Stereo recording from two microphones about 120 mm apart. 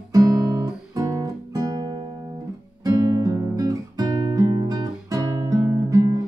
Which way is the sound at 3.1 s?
25° right (ahead or behind).